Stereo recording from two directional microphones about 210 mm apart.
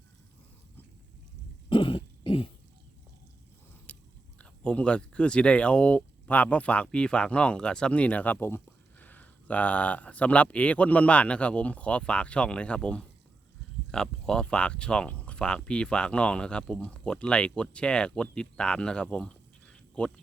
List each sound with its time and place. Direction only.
1.7 s throat clearing: 25° left (ahead or behind)
3.9 s biting: 5° left (ahead or behind)
4.4 s speech: 5° left (ahead or behind)